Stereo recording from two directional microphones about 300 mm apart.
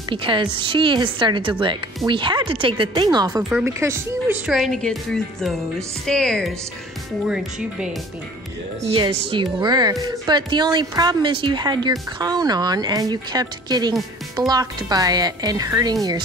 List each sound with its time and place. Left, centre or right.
0.1 s a woman's voice: centre
8.8 s a woman's voice: centre